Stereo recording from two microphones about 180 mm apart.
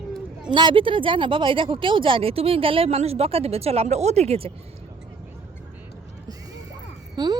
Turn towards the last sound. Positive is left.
turn(degrees=-20)  # may be behind; listen again after turning